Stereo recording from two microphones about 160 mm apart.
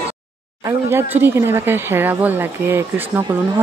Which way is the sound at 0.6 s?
15° right (ahead or behind).